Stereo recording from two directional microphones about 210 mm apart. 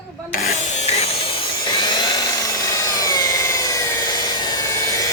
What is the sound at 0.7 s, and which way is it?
Tools, 30° left (ahead or behind).